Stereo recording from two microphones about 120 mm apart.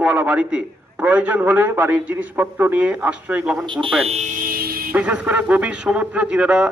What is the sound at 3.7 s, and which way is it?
Speech, 45° right (ahead or behind).